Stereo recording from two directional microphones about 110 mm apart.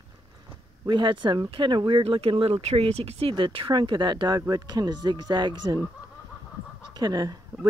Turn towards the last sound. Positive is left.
turn(degrees=-35)  # may be behind; listen again after turning